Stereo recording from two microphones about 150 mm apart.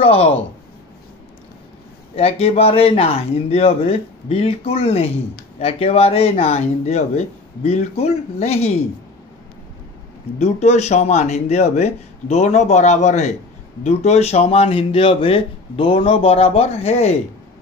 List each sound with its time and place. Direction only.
0.0 s a man's voice: 40° left (ahead or behind)
2.1 s a man's voice: 40° left (ahead or behind)
10.4 s speech: 45° left (ahead or behind)